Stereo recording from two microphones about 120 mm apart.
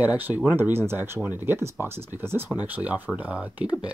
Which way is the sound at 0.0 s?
15° right (ahead or behind).